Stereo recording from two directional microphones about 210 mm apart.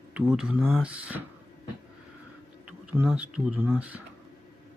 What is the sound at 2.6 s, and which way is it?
Speech, 5° right (ahead or behind).